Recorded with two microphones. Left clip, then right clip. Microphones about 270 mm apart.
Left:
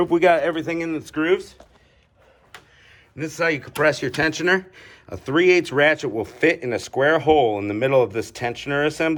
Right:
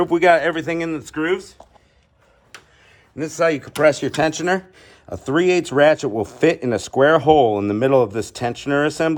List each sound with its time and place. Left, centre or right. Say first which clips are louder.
0.0 s speech: right 2 dB; centre
3.2 s speech: right 4 dB; centre